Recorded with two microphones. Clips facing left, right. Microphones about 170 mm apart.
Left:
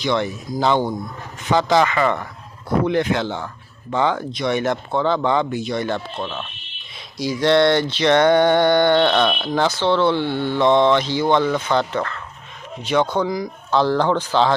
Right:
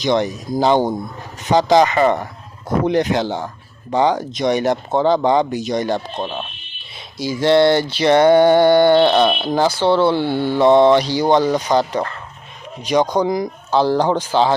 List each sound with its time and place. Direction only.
0.0 s speech: 20° right (ahead or behind)
2.0 s speech: 40° right (ahead or behind)
4.3 s speech: 20° right (ahead or behind)
4.5 s speech: 35° right (ahead or behind)
7.4 s speech: 5° right (ahead or behind)
9.0 s speech: 30° right (ahead or behind)
9.6 s speech: 10° right (ahead or behind)
11.1 s speech: 40° right (ahead or behind)
13.7 s speech: 10° right (ahead or behind)